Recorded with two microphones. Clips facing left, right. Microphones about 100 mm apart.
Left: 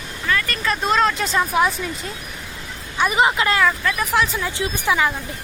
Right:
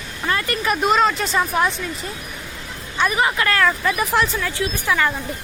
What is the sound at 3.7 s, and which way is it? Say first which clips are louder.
Speech: right 1 dB; 10° right (ahead or behind).